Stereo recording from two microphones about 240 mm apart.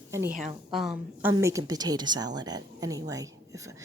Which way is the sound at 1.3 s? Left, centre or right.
Centre.